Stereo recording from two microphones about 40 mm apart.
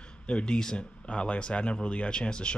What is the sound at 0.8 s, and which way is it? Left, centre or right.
Speech, left.